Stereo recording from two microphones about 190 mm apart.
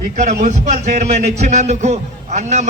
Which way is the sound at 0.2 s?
40° right (ahead or behind).